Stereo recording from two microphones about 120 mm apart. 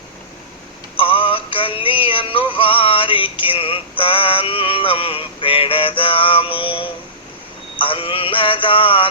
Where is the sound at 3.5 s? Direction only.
50° left (ahead or behind).